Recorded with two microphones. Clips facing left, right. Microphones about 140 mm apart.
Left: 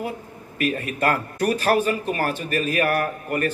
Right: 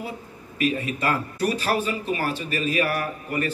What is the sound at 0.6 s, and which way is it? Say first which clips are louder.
Speech: left 1 dB; 55° left (ahead or behind).